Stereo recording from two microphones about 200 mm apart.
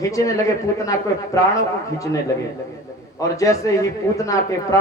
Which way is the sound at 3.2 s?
15° left (ahead or behind).